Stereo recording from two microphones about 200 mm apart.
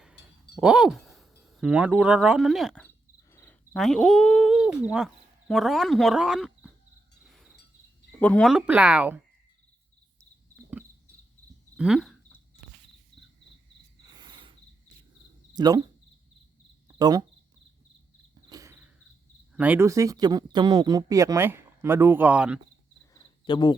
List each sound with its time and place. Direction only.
0.0 s a sound: centre (ahead or behind)
1.4 s speech: centre (ahead or behind)
7.3 s a sound: centre (ahead or behind)
8.2 s speech: 5° left (ahead or behind)
11.8 s a sound: centre (ahead or behind)
14.0 s cricket: 20° right (ahead or behind)
15.5 s speech: 20° right (ahead or behind)
16.9 s speech: 20° right (ahead or behind)
18.4 s cricket: 15° right (ahead or behind)
19.5 s speech: 10° right (ahead or behind)
23.1 s cricket: 20° left (ahead or behind)